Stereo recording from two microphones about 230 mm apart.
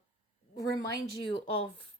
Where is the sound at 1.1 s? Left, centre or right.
Left.